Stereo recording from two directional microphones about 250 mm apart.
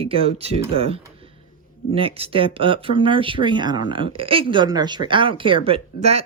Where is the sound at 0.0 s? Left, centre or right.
Right.